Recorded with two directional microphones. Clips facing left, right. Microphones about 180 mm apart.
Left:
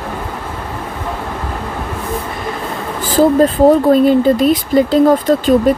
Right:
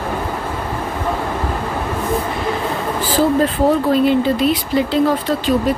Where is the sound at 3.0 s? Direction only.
45° left (ahead or behind).